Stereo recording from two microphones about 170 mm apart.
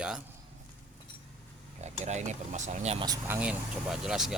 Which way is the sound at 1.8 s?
40° right (ahead or behind).